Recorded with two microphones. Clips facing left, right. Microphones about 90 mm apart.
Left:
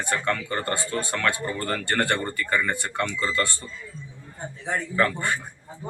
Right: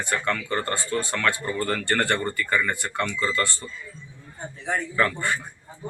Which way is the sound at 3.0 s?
25° right (ahead or behind).